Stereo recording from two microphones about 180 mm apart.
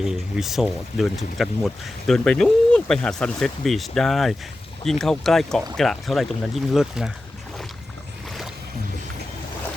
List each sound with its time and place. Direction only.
0.0 s speech: 5° right (ahead or behind)